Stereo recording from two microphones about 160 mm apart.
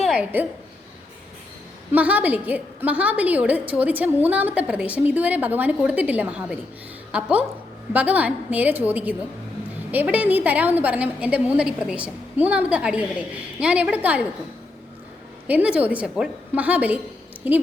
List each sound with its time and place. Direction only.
0.2 s a woman's voice: 10° right (ahead or behind)
1.9 s a woman's voice: 10° right (ahead or behind)
15.4 s a woman's voice: 10° right (ahead or behind)